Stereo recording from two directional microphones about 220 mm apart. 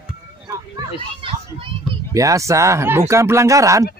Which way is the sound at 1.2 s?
25° right (ahead or behind).